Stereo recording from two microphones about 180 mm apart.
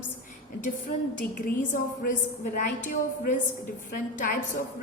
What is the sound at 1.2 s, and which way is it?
A woman's voice, 50° left (ahead or behind).